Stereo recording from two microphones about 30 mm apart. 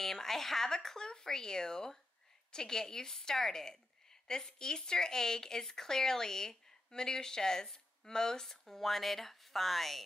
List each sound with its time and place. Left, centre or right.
0.0 s a woman's voice: centre
8.6 s speech: centre